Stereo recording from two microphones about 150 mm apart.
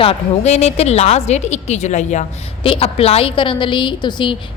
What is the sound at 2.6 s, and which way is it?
A woman's voice, 40° left (ahead or behind).